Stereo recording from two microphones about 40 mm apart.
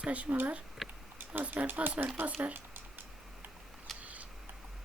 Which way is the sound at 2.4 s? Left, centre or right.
Right.